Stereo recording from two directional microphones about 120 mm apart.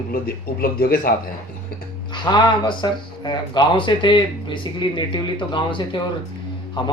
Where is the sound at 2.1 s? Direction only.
40° left (ahead or behind).